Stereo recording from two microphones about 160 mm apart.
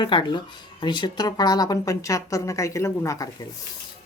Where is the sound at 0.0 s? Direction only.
30° left (ahead or behind).